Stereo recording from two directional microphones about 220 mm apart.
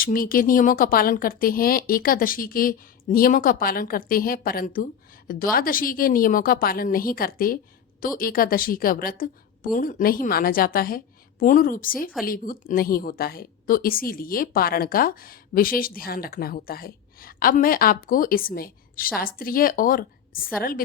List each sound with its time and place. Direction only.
0.0 s a woman's voice: 40° left (ahead or behind)